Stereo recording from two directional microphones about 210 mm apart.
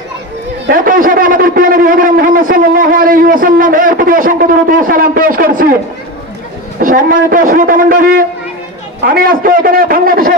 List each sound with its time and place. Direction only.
0.7 s speech: 40° right (ahead or behind)
6.8 s a man's voice: 40° right (ahead or behind)